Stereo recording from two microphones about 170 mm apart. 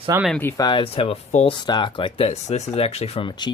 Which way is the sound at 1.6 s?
25° left (ahead or behind).